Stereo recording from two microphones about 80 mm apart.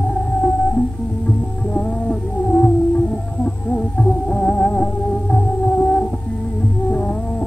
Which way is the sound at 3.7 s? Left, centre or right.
Centre.